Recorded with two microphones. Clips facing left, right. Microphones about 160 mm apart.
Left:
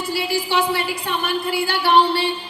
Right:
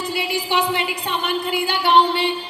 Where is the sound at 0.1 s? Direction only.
20° right (ahead or behind).